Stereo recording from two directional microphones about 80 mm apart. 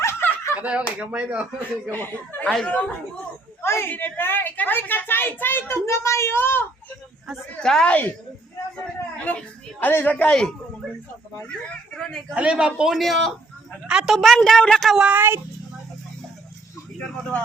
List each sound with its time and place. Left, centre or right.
0.0 s snicker: left
0.5 s a man's voice: centre
1.9 s a woman's voice: left
2.4 s a woman's voice: centre
3.6 s a woman's voice: left
7.6 s a woman's voice: centre
8.7 s a sound: centre
9.8 s a woman's voice: left
11.9 s a woman's voice: centre
12.3 s a man's voice: centre
12.9 s a man's voice: centre
13.8 s a man's voice: centre
14.3 s a woman's voice: centre
15.1 s speech: right